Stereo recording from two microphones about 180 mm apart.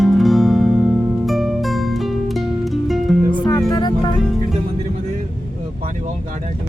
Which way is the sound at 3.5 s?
20° left (ahead or behind).